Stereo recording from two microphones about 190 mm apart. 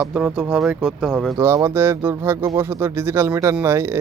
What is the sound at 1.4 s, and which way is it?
Speech, 15° right (ahead or behind).